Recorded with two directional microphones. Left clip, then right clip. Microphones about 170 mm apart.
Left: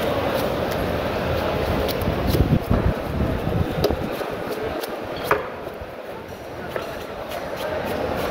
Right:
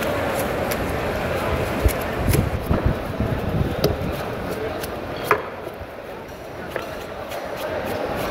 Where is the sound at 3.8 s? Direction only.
40° right (ahead or behind).